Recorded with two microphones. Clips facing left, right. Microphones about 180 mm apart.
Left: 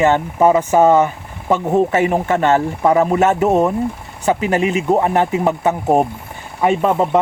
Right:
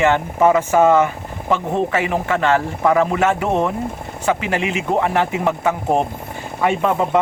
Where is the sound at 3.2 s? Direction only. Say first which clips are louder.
Left 4 dB; 40° left (ahead or behind).